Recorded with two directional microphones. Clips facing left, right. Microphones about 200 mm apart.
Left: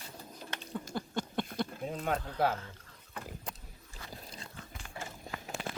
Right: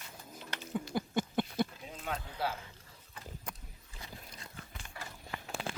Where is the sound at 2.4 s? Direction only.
55° left (ahead or behind).